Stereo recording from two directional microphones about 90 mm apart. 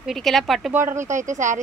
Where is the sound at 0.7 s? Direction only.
25° right (ahead or behind).